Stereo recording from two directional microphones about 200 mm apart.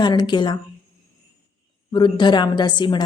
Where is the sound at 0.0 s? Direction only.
20° left (ahead or behind).